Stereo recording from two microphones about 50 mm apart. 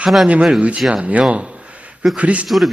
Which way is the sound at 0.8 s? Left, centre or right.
Centre.